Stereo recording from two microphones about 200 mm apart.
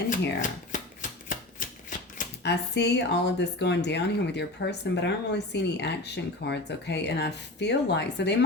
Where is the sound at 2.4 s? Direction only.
55° left (ahead or behind).